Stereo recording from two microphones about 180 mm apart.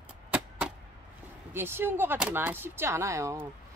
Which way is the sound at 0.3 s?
5° right (ahead or behind).